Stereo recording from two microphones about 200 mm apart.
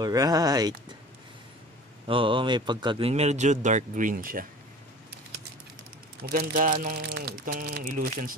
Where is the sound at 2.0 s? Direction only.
25° right (ahead or behind); by 4.4 s 45° right (ahead or behind).